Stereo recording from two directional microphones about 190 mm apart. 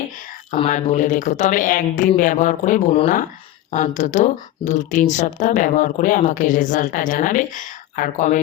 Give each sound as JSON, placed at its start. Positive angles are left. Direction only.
{"t": 0.5, "sound": "a woman's voice", "side_deg": 35}